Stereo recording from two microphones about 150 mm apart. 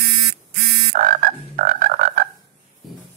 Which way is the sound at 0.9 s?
65° right (ahead or behind).